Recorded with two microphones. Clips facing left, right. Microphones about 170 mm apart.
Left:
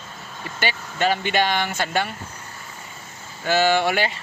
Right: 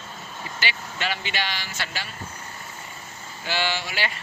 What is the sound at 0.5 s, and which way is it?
Speech, 45° left (ahead or behind).